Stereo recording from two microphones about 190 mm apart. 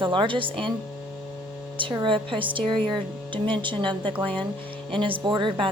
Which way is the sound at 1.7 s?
25° right (ahead or behind).